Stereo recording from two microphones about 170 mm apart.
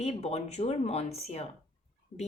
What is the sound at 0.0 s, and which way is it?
Speech, 40° left (ahead or behind).